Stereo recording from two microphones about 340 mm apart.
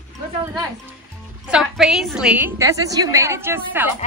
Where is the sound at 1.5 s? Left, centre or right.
Centre.